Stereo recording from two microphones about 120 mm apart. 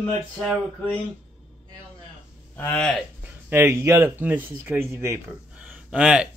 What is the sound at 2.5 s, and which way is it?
Speech, 15° left (ahead or behind).